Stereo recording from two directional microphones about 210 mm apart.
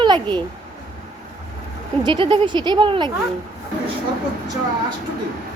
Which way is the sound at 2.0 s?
25° right (ahead or behind).